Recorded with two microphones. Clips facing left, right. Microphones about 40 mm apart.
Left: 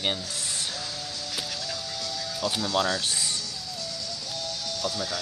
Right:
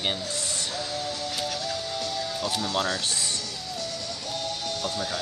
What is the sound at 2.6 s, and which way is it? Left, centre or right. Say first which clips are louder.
Speech: left 3 dB; right.